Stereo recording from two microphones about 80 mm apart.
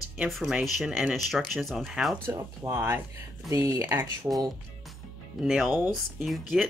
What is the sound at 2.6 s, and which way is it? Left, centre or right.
Speech, right.